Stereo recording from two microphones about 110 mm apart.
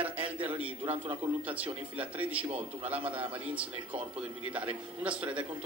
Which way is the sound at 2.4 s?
65° right (ahead or behind).